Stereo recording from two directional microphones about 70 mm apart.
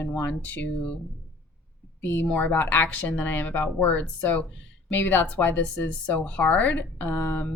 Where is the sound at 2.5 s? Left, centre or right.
Left.